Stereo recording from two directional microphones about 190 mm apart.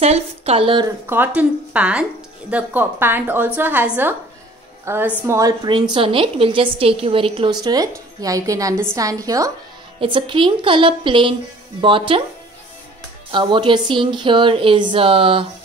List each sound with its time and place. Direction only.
0.0 s a woman's voice: 35° right (ahead or behind)
1.0 s a woman's voice: 10° right (ahead or behind); by 12.3 s 25° right (ahead or behind)
13.3 s a woman's voice: 25° right (ahead or behind)